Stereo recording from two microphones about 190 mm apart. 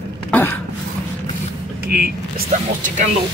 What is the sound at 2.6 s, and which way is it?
Speech, 40° right (ahead or behind).